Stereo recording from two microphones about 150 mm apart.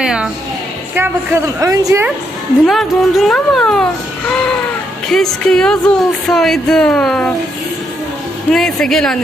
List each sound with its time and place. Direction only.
0.0 s a woman's voice: 5° right (ahead or behind); by 2.0 s 20° right (ahead or behind)
2.6 s speech: centre (ahead or behind)
5.1 s speech: 5° left (ahead or behind)
8.5 s speech: 5° left (ahead or behind)